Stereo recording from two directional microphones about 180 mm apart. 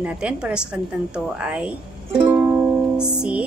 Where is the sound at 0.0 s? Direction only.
5° right (ahead or behind).